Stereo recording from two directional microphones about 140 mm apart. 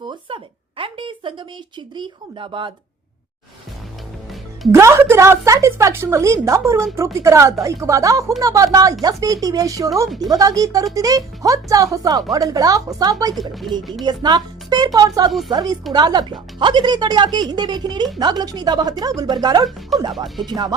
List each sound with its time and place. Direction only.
0.8 s a sound: 40° right (ahead or behind)
2.0 s speech: 35° right (ahead or behind)
4.7 s a woman's voice: 20° right (ahead or behind)
13.3 s speech: centre (ahead or behind)
14.0 s a woman's voice: 30° right (ahead or behind)
20.2 s speech: centre (ahead or behind)
20.5 s a woman's voice: 30° right (ahead or behind)